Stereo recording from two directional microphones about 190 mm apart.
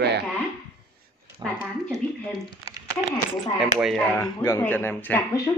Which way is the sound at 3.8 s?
Centre (ahead or behind).